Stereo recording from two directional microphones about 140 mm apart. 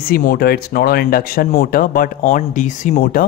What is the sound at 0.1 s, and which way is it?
Speech, 90° left.